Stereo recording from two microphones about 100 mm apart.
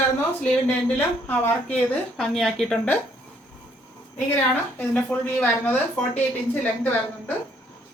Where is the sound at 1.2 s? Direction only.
15° left (ahead or behind).